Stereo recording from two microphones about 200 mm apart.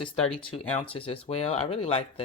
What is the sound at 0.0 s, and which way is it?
Speech, 25° left (ahead or behind).